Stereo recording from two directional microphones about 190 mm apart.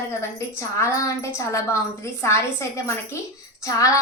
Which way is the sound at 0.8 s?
15° left (ahead or behind).